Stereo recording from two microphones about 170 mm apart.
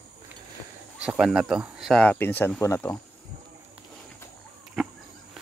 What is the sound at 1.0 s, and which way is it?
Speech, 5° right (ahead or behind).